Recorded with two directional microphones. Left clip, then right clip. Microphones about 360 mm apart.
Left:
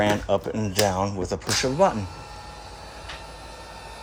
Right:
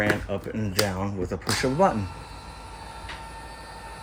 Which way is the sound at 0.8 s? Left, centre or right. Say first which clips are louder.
Left 4 dB; centre.